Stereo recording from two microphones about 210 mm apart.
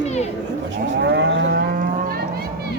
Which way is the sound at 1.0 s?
55° right (ahead or behind).